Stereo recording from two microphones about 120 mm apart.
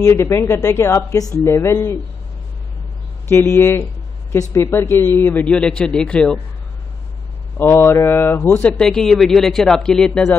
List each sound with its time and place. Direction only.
0.0 s speech: 25° left (ahead or behind)
3.3 s speech: 20° left (ahead or behind)
5.4 s speech: 5° left (ahead or behind)
7.5 s speech: 20° left (ahead or behind)